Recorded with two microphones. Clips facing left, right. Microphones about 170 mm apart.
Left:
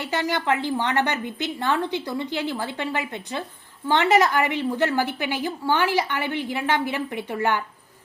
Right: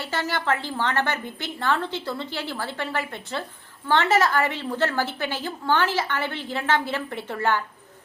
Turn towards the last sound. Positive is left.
turn(degrees=15)  # may be behind; listen again after turning